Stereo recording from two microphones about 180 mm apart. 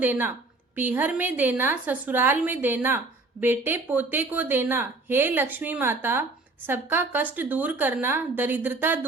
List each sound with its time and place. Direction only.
0.0 s a woman's voice: 10° right (ahead or behind)